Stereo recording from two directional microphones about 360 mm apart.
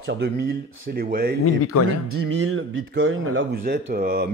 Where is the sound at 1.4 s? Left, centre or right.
Left.